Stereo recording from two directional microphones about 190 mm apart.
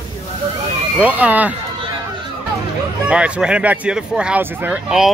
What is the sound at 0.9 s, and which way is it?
Speech, 5° right (ahead or behind).